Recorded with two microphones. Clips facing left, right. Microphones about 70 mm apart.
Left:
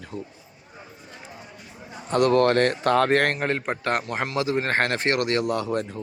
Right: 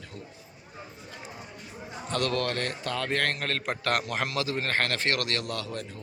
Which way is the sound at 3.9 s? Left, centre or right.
Centre.